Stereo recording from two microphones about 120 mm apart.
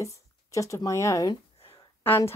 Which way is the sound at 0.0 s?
25° left (ahead or behind).